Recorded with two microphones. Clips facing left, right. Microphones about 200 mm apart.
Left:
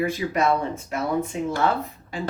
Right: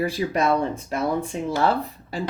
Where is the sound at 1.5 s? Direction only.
35° right (ahead or behind).